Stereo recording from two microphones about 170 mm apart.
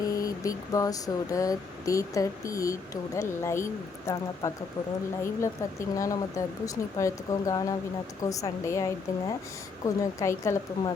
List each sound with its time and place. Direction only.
0.0 s speech: 20° left (ahead or behind)
6.0 s speech: 20° left (ahead or behind)